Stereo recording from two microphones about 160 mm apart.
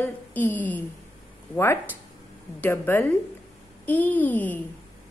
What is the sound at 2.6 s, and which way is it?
A woman's voice, 15° left (ahead or behind).